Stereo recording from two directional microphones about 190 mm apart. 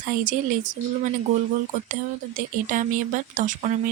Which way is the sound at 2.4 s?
45° right (ahead or behind).